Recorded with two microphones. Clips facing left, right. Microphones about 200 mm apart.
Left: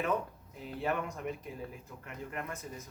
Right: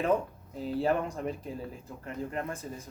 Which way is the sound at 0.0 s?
30° right (ahead or behind).